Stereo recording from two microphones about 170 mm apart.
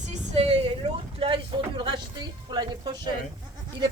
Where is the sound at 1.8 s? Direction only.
25° right (ahead or behind).